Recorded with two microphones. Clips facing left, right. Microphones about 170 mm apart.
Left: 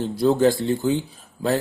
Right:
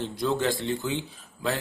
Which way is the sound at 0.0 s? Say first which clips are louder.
Left 9 dB; 40° left (ahead or behind).